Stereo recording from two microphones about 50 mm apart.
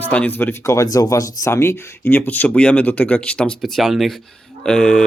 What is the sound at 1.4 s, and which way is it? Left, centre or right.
Speech, left.